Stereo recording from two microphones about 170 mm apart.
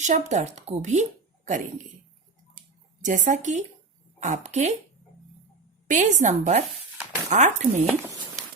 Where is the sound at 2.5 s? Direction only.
50° right (ahead or behind).